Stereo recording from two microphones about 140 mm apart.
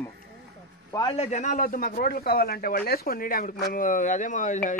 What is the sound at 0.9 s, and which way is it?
Speech, 30° left (ahead or behind).